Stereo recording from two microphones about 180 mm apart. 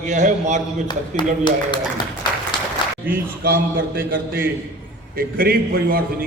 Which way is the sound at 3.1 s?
55° right (ahead or behind).